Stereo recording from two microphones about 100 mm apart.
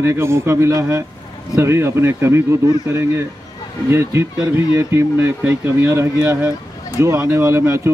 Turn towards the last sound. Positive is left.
turn(degrees=-30)  # may be behind; listen again after turning